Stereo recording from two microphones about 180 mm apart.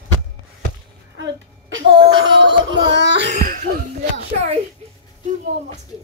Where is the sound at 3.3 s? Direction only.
45° right (ahead or behind).